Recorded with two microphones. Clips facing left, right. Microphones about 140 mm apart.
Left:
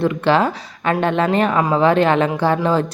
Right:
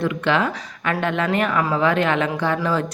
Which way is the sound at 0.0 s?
35° left (ahead or behind).